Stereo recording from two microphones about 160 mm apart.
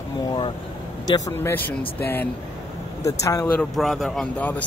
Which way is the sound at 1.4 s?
10° left (ahead or behind).